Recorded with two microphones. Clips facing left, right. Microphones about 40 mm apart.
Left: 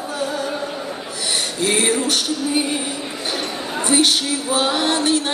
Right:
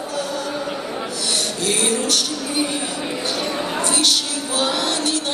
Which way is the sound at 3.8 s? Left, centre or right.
Left.